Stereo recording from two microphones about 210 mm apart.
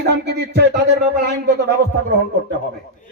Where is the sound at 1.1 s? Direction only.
45° right (ahead or behind).